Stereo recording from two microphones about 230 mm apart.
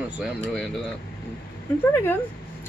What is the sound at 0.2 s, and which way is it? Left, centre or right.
Speech, centre.